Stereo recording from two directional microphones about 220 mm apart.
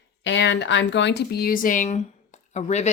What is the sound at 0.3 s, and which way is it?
A woman's voice, 55° left (ahead or behind).